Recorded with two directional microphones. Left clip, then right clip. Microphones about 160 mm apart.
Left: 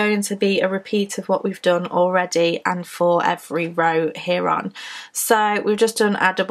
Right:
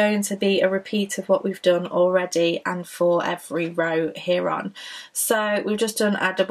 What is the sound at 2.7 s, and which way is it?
Speech, 25° left (ahead or behind).